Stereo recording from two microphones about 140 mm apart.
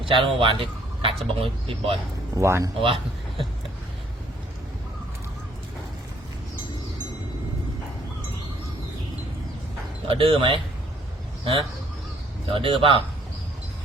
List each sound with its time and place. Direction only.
0.0 s speech: 40° right (ahead or behind)
2.3 s speech: 20° right (ahead or behind)
2.8 s a man's voice: 40° right (ahead or behind)
10.1 s speech: 40° right (ahead or behind)
12.5 s speech: 40° right (ahead or behind)